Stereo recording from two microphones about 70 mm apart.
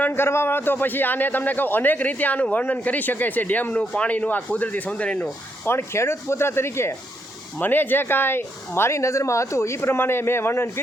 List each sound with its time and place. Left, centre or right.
0.1 s a man's voice: left; by 5.3 s centre
5.6 s speech: left